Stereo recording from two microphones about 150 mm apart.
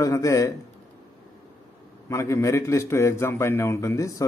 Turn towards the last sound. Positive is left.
turn(degrees=20)  # may be behind; listen again after turning